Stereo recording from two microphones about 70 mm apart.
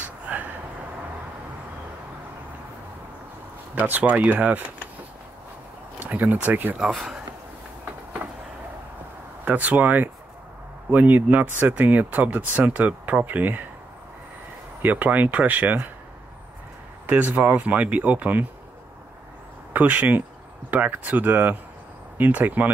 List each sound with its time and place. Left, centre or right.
0.3 s a sound: right
3.7 s speech: right
5.9 s speech: right
9.4 s speech: right
14.8 s speech: right
17.0 s speech: right
19.7 s speech: right